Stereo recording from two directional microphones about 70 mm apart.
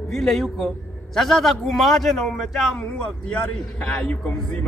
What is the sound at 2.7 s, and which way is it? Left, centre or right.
A man's voice, centre.